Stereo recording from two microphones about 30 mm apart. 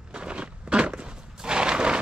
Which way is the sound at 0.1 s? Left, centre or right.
Right.